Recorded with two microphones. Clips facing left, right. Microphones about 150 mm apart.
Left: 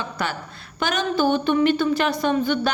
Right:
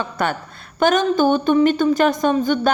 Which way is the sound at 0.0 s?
50° right (ahead or behind).